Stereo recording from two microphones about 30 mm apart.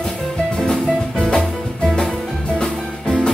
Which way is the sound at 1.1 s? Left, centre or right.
Left.